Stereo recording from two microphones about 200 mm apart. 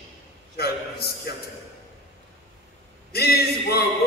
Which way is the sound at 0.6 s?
55° left (ahead or behind).